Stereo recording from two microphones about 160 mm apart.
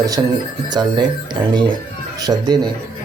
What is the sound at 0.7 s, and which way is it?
A man's voice, 25° right (ahead or behind).